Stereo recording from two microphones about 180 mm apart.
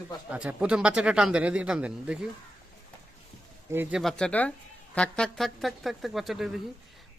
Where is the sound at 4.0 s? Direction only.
5° left (ahead or behind).